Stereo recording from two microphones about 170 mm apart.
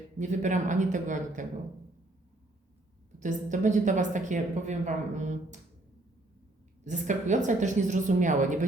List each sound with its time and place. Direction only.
0.2 s speech: 45° right (ahead or behind)
3.2 s speech: 45° right (ahead or behind)
6.8 s speech: 45° right (ahead or behind)